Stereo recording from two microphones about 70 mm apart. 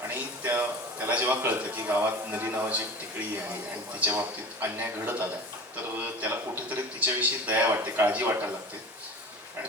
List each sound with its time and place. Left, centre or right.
0.1 s a man's voice: right
4.6 s a man's voice: right